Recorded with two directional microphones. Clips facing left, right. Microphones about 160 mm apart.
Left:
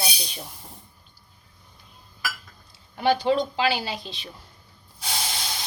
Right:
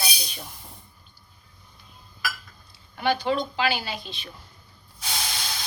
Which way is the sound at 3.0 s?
35° left (ahead or behind).